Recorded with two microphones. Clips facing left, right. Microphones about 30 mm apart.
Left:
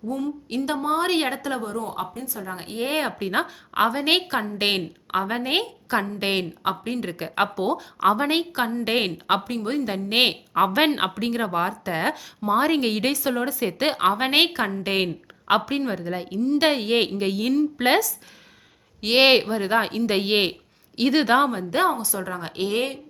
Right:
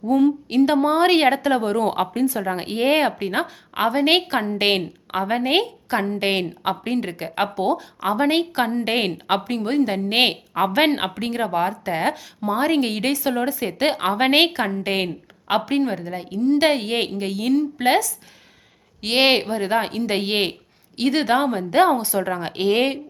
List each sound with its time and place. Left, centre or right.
0.0 s a woman's voice: right
0.5 s speech: right
1.6 s speech: right
2.4 s speech: right
2.8 s speech: centre
3.2 s a woman's voice: centre
21.5 s a woman's voice: centre
21.9 s speech: right
22.3 s speech: right